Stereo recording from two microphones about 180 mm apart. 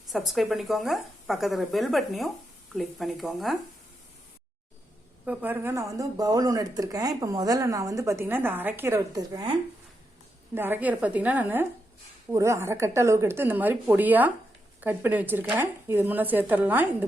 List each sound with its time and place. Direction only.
0.1 s speech: centre (ahead or behind)
5.2 s speech: 10° right (ahead or behind); by 9.6 s 25° right (ahead or behind)
10.5 s a woman's voice: 10° right (ahead or behind)